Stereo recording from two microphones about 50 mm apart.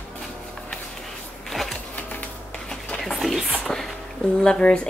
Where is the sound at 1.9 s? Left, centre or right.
Left.